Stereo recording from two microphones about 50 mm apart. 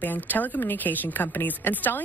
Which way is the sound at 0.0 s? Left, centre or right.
Left.